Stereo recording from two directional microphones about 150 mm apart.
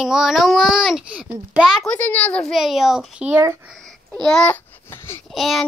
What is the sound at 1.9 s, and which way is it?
A child's voice, 10° left (ahead or behind).